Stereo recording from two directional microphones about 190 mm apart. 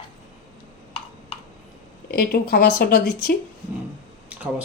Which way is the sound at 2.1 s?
50° left (ahead or behind).